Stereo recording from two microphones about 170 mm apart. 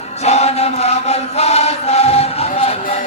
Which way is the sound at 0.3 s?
40° left (ahead or behind).